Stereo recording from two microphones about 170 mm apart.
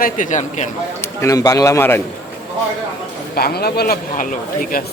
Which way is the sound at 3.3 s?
65° left (ahead or behind).